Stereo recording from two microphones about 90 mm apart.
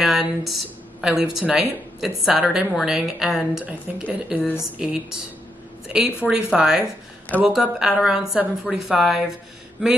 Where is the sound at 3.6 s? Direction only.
15° right (ahead or behind); by 8.8 s centre (ahead or behind).